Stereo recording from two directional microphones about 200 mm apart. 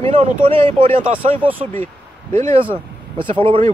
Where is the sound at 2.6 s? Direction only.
25° right (ahead or behind).